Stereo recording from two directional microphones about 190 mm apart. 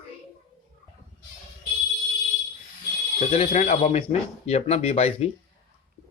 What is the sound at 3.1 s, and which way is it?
Speech, 35° left (ahead or behind).